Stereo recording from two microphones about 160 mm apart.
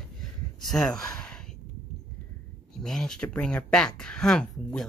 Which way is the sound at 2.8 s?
5° left (ahead or behind).